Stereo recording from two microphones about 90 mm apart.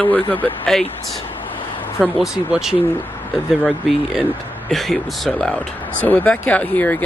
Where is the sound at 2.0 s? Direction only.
5° right (ahead or behind).